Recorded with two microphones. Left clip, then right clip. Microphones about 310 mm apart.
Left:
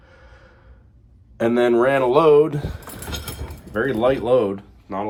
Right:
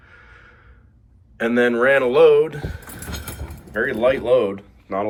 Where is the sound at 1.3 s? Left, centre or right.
Centre.